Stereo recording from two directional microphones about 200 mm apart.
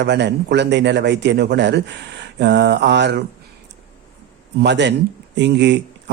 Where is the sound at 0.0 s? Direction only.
60° right (ahead or behind).